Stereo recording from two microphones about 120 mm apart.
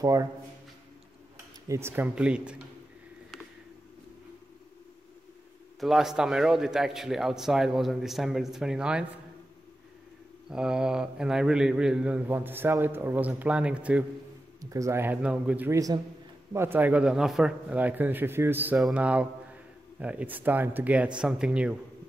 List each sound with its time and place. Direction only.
0.0 s speech: 30° right (ahead or behind)
1.7 s speech: 20° right (ahead or behind)
2.1 s a man's voice: 10° right (ahead or behind)
5.8 s a man's voice: centre (ahead or behind)
10.5 s a man's voice: 5° right (ahead or behind)
14.6 s a man's voice: 25° right (ahead or behind); by 15.7 s 10° right (ahead or behind)
15.7 s speech: 30° right (ahead or behind)
16.5 s a man's voice: 20° right (ahead or behind)
18.8 s a man's voice: 5° right (ahead or behind)